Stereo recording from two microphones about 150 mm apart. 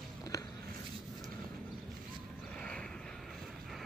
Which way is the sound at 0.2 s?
25° left (ahead or behind).